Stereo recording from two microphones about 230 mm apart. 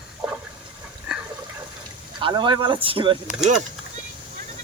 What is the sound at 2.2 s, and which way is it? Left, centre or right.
Speech, right.